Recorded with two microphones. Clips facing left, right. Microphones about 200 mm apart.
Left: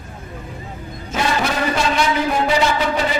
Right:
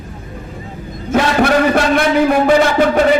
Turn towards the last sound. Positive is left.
turn(degrees=-55)  # may be behind; listen again after turning